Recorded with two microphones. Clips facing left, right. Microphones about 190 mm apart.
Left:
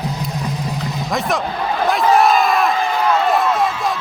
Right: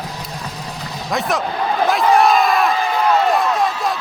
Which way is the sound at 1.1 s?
Centre (ahead or behind).